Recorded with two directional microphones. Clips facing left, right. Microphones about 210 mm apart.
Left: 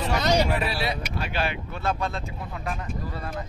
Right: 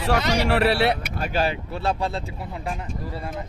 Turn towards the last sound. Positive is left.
turn(degrees=-20)  # may be behind; listen again after turning